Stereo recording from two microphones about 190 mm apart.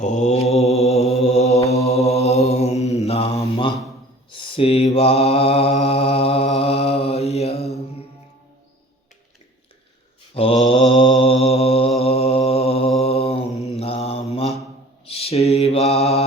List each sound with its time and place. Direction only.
0.0 s mantra: 40° left (ahead or behind)
10.3 s mantra: 30° left (ahead or behind)